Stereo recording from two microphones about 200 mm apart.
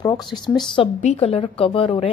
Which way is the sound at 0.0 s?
20° left (ahead or behind).